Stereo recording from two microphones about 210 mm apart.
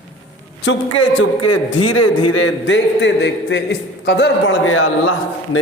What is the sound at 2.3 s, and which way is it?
A man's voice, 70° left (ahead or behind).